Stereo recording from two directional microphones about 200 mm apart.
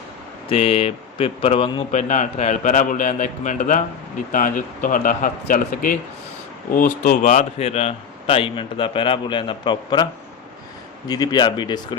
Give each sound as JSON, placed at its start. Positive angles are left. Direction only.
{"t": 0.4, "sound": "a man's voice", "side_deg": 30}
{"t": 11.1, "sound": "a man's voice", "side_deg": 20}